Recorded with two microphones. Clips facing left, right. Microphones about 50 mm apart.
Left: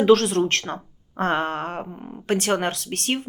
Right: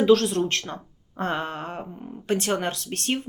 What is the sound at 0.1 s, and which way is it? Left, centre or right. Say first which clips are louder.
Speech: left 2 dB; left.